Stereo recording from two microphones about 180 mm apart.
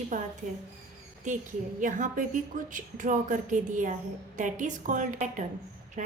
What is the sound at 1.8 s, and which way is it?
A woman's voice, 45° right (ahead or behind).